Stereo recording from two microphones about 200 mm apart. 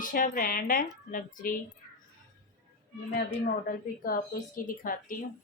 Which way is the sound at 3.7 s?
45° left (ahead or behind).